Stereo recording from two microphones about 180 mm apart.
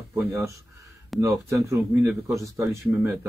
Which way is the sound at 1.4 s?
15° right (ahead or behind).